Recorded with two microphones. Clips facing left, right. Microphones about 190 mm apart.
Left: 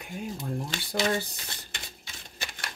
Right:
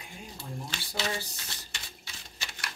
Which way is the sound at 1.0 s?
55° left (ahead or behind).